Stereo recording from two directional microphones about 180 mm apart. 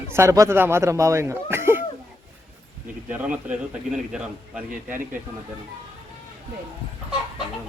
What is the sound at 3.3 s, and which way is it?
A man's voice, 5° right (ahead or behind).